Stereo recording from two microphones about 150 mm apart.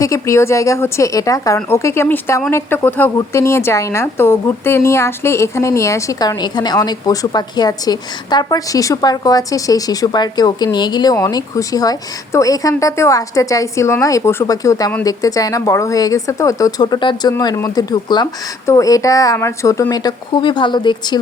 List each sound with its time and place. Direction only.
0.0 s a woman's voice: 20° left (ahead or behind)